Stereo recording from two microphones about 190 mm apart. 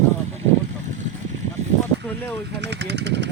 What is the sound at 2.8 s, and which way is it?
Vehicle, 65° right (ahead or behind).